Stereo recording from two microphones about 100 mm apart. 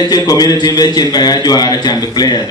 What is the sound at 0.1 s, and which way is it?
A man's voice, 40° left (ahead or behind).